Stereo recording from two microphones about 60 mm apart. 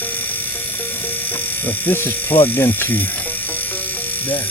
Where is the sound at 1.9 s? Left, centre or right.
Left.